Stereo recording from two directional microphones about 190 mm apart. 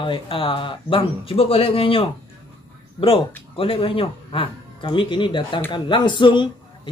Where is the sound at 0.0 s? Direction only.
30° left (ahead or behind).